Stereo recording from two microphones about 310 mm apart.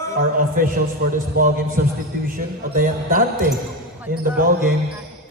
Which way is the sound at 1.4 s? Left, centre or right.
Right.